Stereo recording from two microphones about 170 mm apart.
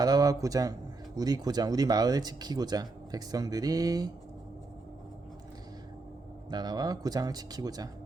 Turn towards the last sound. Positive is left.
turn(degrees=-20)  # may be behind; listen again after turning